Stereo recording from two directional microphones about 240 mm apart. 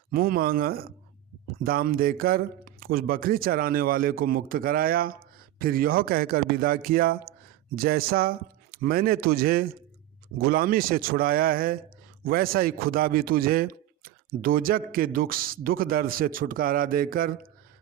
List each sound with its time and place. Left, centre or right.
0.1 s a man's voice: right